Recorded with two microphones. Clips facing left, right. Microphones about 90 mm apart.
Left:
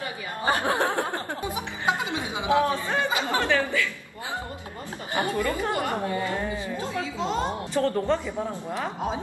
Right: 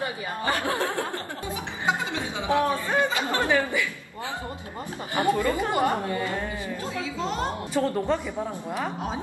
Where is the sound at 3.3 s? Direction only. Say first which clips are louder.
Right 1 dB; 15° right (ahead or behind).